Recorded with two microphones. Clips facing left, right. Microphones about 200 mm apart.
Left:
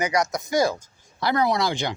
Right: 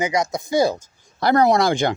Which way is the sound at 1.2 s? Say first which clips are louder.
Right 6 dB; 45° right (ahead or behind).